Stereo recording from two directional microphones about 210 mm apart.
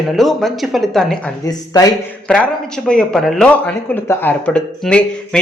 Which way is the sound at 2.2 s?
5° left (ahead or behind).